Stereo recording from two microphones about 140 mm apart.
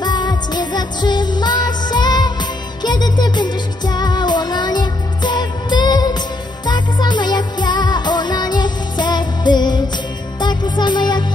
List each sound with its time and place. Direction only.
0.0 s music: 30° left (ahead or behind)